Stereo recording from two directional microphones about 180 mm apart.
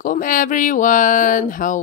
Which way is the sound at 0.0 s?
50° left (ahead or behind).